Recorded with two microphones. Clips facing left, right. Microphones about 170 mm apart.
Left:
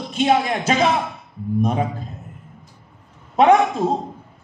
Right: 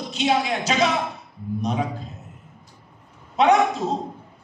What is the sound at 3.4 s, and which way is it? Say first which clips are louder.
Speech: left 4 dB; 50° left (ahead or behind).